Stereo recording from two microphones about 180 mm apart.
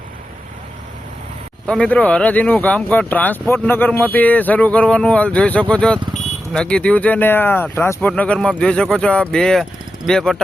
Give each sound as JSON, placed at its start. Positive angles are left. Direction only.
{"t": 1.6, "sound": "speech", "side_deg": 5}